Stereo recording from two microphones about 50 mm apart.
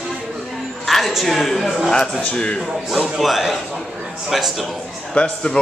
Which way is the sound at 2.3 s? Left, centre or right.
Centre.